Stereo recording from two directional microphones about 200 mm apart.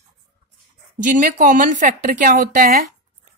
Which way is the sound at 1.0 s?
40° right (ahead or behind).